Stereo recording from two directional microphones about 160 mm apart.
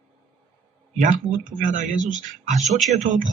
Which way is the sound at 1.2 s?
55° right (ahead or behind).